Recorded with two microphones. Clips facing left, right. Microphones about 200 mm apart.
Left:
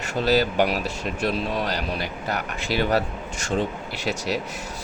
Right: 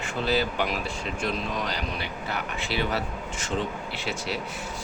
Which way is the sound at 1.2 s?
35° left (ahead or behind).